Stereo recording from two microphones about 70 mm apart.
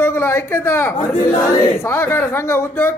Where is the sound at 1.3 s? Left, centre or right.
Left.